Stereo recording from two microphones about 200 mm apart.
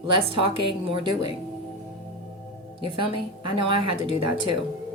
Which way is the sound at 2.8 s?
25° right (ahead or behind).